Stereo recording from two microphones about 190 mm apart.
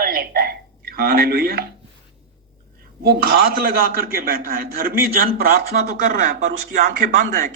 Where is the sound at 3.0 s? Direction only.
50° right (ahead or behind).